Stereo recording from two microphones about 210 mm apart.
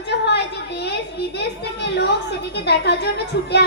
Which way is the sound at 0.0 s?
55° left (ahead or behind).